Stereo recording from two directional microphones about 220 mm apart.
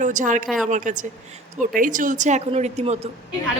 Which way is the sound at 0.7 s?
35° right (ahead or behind).